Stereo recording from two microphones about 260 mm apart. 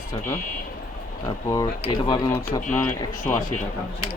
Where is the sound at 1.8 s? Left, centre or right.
Centre.